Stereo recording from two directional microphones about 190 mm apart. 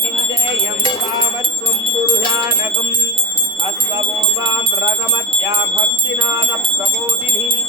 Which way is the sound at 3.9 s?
25° right (ahead or behind).